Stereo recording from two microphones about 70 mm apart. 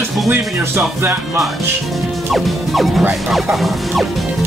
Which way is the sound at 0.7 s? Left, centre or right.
Right.